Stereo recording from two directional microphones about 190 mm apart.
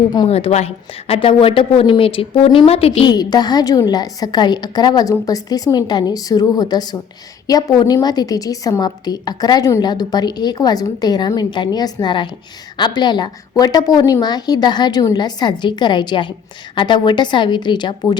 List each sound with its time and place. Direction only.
0.1 s a woman's voice: 25° left (ahead or behind)